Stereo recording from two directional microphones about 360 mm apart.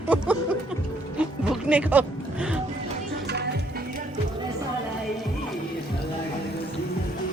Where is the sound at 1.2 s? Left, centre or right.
Centre.